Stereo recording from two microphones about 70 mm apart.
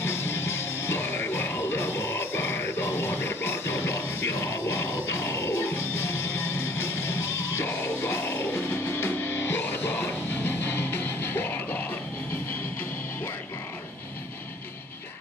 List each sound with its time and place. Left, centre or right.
0.0 s music: left